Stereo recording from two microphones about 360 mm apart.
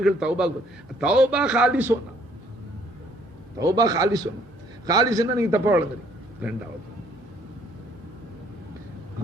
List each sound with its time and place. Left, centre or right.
0.0 s a man's voice: centre
3.6 s a man's voice: centre